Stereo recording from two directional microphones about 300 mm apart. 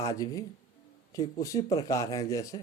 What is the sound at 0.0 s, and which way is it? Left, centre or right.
Speech, centre.